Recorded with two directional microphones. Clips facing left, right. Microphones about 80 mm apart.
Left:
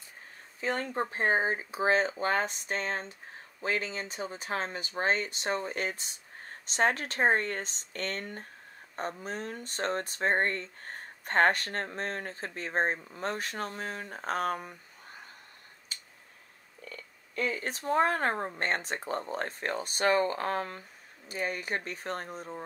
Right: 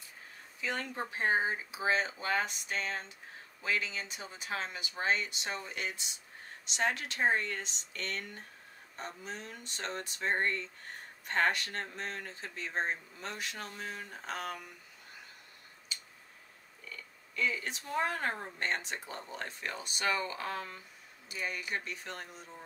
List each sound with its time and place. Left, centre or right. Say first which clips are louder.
0.6 s speech: left 6 dB; left
15.9 s tick: right 1 dB; left
16.9 s speech: left 6 dB; left